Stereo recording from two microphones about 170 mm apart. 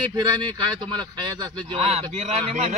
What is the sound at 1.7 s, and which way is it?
Speech, 40° right (ahead or behind).